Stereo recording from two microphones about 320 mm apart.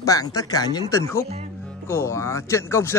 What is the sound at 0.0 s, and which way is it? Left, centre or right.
Speech, centre.